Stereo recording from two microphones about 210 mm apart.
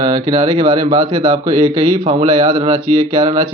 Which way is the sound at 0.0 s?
20° right (ahead or behind).